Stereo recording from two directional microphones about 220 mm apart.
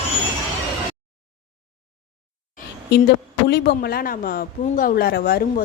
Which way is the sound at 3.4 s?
50° left (ahead or behind).